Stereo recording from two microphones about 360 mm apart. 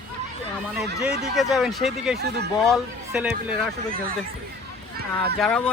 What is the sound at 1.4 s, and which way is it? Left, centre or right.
Speech, centre.